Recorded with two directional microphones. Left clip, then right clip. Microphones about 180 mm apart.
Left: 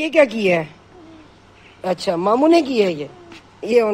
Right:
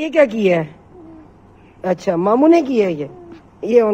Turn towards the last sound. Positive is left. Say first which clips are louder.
# right 2 dB
turn(degrees=5)  # may be behind; listen again after turning